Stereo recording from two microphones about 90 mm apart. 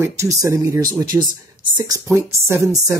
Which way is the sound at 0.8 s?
50° right (ahead or behind).